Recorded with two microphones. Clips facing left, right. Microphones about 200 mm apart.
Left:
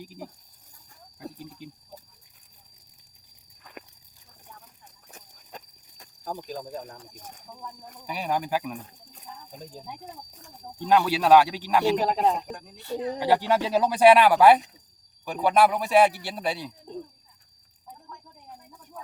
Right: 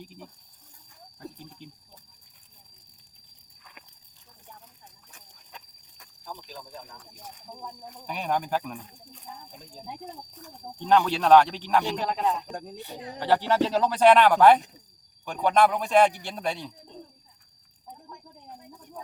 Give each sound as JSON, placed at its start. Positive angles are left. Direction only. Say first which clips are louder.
{"t": 1.2, "sound": "speech", "louder": "left 3 dB", "side_deg": 10}
{"t": 5.1, "sound": "a sound", "louder": "left 7 dB", "side_deg": 40}
{"t": 8.0, "sound": "speech", "louder": "even", "side_deg": 5}
{"t": 10.8, "sound": "speech", "louder": "even", "side_deg": 5}
{"t": 12.0, "sound": "speech", "louder": "left 3 dB", "side_deg": 35}
{"t": 12.7, "sound": "speech", "louder": "left 7 dB", "side_deg": -15}
{"t": 13.1, "sound": "speech", "louder": "right 1 dB", "side_deg": 10}